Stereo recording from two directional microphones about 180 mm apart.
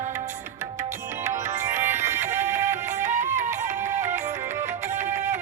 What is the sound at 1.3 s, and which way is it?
Music, 40° right (ahead or behind).